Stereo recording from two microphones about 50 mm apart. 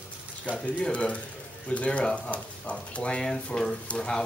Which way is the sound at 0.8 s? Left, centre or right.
Left.